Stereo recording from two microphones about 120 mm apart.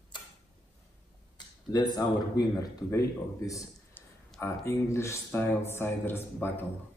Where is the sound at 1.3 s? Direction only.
35° left (ahead or behind); by 6.6 s 15° left (ahead or behind).